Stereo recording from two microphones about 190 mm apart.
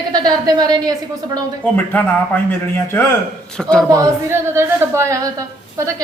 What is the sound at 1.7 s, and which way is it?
A man's voice, 10° left (ahead or behind).